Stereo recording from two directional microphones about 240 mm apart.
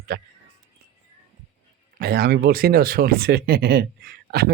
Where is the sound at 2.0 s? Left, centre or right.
Right.